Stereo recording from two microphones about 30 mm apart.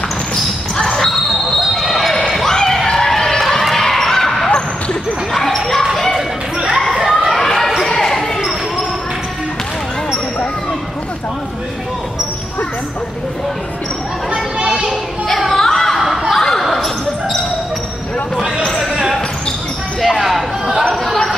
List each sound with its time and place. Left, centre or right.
0.9 s basketball bounce: centre
2.3 s a sound: centre
3.1 s run: centre
3.7 s basketball bounce: centre
5.3 s dog: centre
7.1 s a sound: centre
7.9 s basketball bounce: centre
15.5 s a sound: centre
16.3 s basketball bounce: centre
20.0 s basketball bounce: centre
20.9 s chatter: centre